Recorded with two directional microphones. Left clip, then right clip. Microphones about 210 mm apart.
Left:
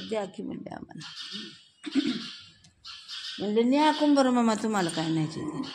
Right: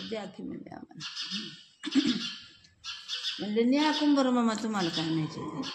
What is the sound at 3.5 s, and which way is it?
A woman's voice, 40° left (ahead or behind).